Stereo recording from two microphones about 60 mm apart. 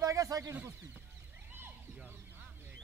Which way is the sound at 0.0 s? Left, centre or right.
Right.